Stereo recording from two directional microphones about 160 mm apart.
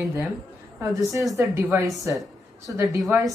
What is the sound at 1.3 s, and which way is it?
Speech, 15° right (ahead or behind).